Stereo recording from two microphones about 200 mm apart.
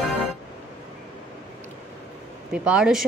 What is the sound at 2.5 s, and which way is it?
Speech, 5° right (ahead or behind).